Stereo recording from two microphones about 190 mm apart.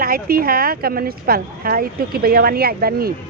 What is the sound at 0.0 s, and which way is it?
Speech, 50° right (ahead or behind).